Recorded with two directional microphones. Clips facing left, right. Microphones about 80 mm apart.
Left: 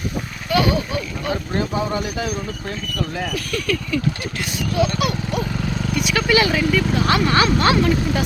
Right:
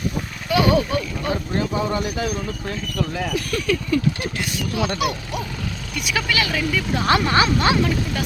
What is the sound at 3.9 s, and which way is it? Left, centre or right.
Speech, right.